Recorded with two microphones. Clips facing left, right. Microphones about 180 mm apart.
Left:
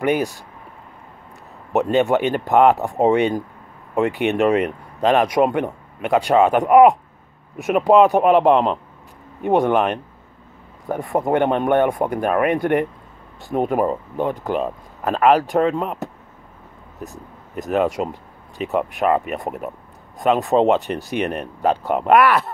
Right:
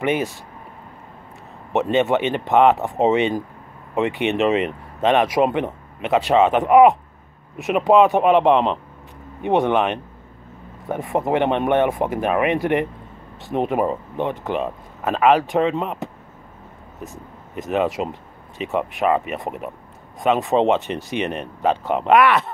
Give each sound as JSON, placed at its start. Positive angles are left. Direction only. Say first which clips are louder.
{"t": 0.0, "sound": "speech", "louder": "left 2 dB", "side_deg": 0}
{"t": 1.7, "sound": "speech", "louder": "left 1 dB", "side_deg": 0}
{"t": 20.9, "sound": "speech", "louder": "left 2 dB", "side_deg": 50}
{"t": 21.4, "sound": "speech", "louder": "left 1 dB", "side_deg": 5}